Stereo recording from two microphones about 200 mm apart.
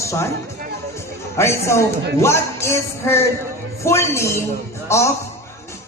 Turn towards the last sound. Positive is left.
turn(degrees=15)  # may be behind; listen again after turning